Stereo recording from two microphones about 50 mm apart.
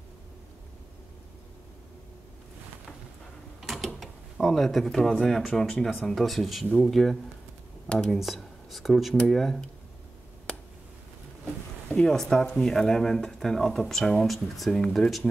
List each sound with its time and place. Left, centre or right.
3.6 s mechanisms: centre
5.2 s speech: centre
10.5 s a sound: centre
11.9 s speech: centre